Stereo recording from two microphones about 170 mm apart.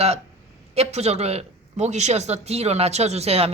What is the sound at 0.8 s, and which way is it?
A woman's voice, 40° right (ahead or behind).